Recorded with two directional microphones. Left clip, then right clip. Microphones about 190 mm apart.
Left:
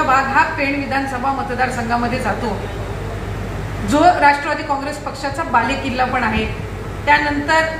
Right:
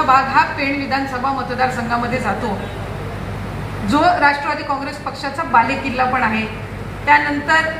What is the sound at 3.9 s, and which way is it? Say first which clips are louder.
Speech: left 2 dB; 30° left (ahead or behind).